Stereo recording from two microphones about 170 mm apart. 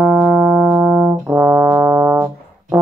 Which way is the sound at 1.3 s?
20° right (ahead or behind).